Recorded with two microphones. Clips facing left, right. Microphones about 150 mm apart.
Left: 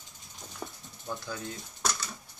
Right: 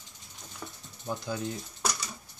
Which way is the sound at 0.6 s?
15° left (ahead or behind).